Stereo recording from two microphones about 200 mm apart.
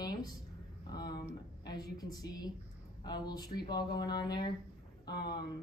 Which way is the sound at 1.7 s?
20° left (ahead or behind).